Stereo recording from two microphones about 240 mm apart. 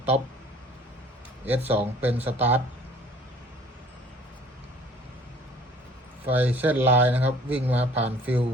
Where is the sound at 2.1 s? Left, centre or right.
Centre.